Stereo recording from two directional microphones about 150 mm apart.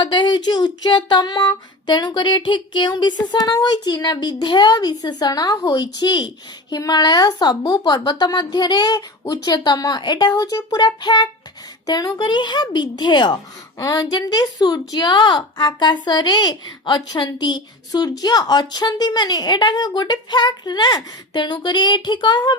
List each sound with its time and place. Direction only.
0.0 s female singing: 30° left (ahead or behind)